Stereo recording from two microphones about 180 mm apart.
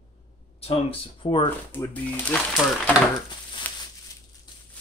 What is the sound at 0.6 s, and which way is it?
Speech, 30° left (ahead or behind).